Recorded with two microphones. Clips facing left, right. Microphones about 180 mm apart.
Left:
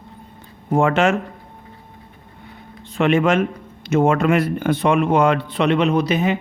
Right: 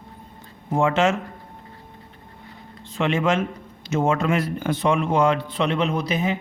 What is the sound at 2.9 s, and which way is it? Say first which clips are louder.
Speech: left 5 dB; 60° left (ahead or behind).